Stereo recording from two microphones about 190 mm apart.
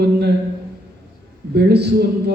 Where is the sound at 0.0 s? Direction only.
60° right (ahead or behind).